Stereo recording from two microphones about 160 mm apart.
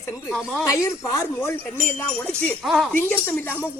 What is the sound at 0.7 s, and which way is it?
Speech, 20° left (ahead or behind).